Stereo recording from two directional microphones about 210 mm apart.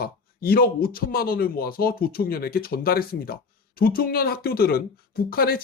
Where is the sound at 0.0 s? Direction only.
45° left (ahead or behind).